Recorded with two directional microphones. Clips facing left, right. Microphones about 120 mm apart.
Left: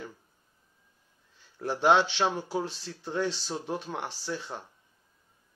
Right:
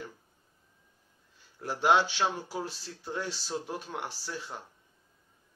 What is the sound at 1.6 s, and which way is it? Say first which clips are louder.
Speech: left 2 dB; 25° left (ahead or behind).